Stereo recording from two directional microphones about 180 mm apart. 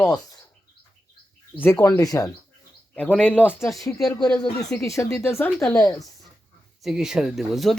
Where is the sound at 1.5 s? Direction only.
15° left (ahead or behind).